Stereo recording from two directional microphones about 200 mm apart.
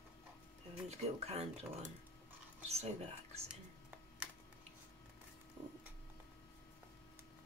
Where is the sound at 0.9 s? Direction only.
30° right (ahead or behind).